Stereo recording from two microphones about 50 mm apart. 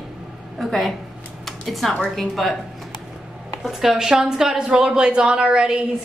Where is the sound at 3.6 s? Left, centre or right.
Centre.